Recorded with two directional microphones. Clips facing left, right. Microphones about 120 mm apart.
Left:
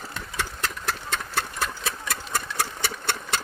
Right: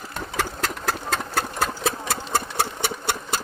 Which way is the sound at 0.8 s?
45° right (ahead or behind).